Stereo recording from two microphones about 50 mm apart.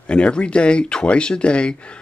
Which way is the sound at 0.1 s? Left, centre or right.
Left.